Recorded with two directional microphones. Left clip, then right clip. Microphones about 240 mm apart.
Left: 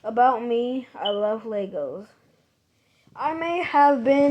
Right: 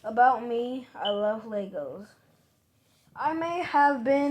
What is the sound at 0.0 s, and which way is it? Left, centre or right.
Speech, left.